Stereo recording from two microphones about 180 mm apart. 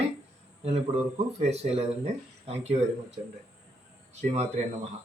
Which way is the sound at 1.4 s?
35° right (ahead or behind).